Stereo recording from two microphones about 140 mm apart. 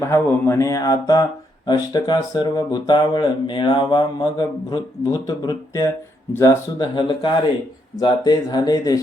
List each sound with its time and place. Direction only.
0.0 s speech: 20° left (ahead or behind)
6.7 s speech: 30° left (ahead or behind)